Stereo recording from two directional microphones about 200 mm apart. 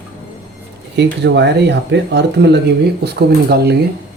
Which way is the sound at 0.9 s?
60° right (ahead or behind).